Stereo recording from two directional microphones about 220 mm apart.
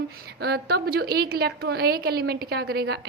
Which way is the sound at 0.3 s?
45° right (ahead or behind).